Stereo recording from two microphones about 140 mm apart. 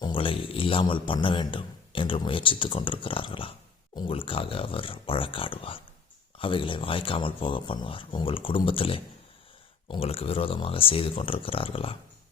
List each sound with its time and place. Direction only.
0.0 s a man's voice: 40° left (ahead or behind)